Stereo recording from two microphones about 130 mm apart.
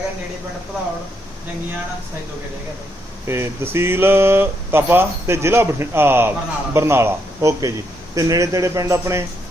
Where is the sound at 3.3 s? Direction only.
20° right (ahead or behind).